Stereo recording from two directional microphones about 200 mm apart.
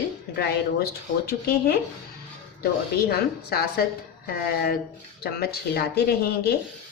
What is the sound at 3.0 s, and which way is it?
Speech, 50° left (ahead or behind).